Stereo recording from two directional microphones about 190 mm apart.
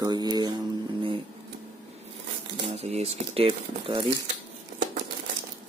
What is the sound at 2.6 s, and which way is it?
Speech, 30° right (ahead or behind).